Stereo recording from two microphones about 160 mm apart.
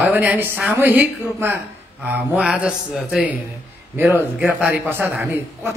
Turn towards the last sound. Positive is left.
turn(degrees=-15)  # may be behind; listen again after turning